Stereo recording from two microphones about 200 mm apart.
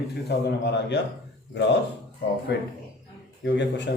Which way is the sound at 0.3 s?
55° left (ahead or behind).